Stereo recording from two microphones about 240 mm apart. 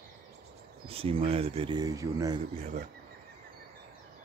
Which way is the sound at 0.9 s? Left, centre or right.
Right.